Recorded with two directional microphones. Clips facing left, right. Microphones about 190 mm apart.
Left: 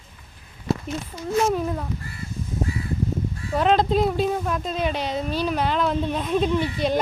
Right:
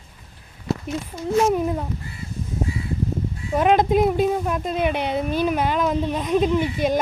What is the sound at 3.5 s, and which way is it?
Speech, 15° right (ahead or behind).